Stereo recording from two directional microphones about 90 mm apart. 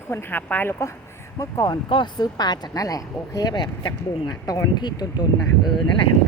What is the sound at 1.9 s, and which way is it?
Speech, 60° left (ahead or behind).